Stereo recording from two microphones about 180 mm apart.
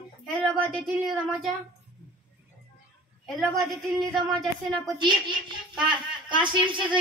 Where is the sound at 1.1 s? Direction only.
Centre (ahead or behind).